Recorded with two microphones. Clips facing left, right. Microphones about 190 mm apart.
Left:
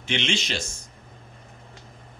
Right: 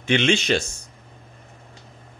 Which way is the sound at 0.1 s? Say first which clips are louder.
Right 8 dB; 55° right (ahead or behind).